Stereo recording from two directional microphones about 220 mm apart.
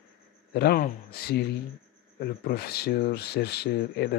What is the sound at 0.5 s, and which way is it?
Speech, 45° left (ahead or behind).